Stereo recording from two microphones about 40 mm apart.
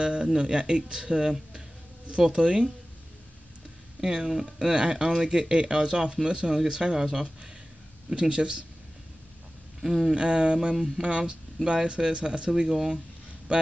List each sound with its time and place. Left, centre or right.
0.0 s speech: right
4.0 s speech: centre
8.1 s speech: right
9.8 s speech: centre
10.1 s speech: right; by 12.9 s centre
13.5 s a man's voice: right